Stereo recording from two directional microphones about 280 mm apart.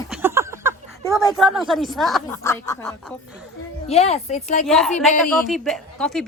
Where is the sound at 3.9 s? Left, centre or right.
Left.